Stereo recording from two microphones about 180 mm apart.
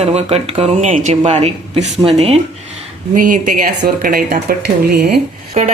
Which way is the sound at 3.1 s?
50° right (ahead or behind).